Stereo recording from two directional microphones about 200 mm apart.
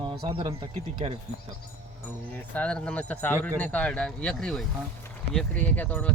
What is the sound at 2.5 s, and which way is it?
Speech, 5° left (ahead or behind).